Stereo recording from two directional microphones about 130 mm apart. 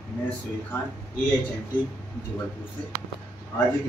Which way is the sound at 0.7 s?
20° left (ahead or behind).